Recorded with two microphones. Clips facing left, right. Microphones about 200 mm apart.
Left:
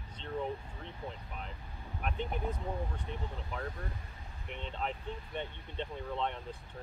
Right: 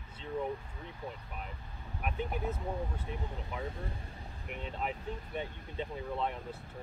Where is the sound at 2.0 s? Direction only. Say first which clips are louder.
Right 1 dB; 5° right (ahead or behind).